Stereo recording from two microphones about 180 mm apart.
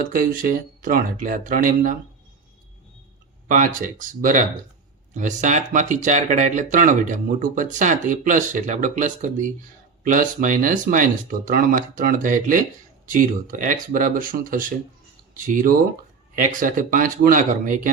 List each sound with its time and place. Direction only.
0.1 s speech: 50° right (ahead or behind)
3.5 s speech: 45° right (ahead or behind)